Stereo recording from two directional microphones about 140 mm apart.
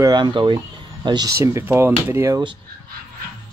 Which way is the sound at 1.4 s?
20° right (ahead or behind).